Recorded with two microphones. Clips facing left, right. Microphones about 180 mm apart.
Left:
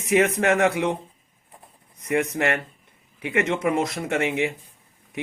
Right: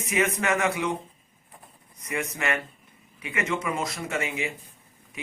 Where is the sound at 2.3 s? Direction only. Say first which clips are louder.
Left 5 dB; 60° left (ahead or behind).